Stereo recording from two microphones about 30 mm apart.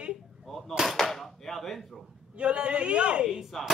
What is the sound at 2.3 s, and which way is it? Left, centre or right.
Speech, right.